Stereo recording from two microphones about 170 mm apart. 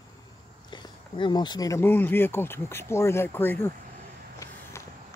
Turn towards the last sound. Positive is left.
turn(degrees=20)  # may be behind; listen again after turning